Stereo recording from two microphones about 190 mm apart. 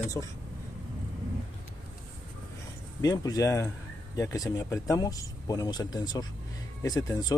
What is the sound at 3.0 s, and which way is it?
Speech, 20° left (ahead or behind).